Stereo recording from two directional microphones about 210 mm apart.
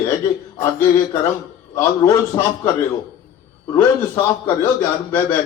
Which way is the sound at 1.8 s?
10° left (ahead or behind).